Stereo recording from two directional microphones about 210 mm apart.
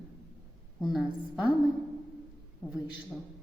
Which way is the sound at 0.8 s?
Centre (ahead or behind).